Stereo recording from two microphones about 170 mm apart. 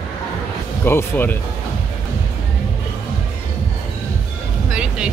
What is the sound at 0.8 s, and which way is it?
Music, 15° left (ahead or behind).